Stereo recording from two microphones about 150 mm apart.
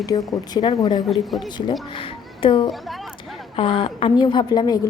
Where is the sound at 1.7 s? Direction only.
35° left (ahead or behind).